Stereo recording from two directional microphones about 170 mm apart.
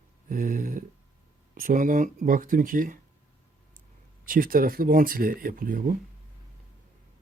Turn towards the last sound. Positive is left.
turn(degrees=-55)  # may be behind; listen again after turning